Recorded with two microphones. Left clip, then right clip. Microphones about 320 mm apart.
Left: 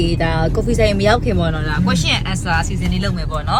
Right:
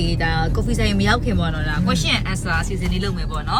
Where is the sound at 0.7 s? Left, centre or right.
Centre.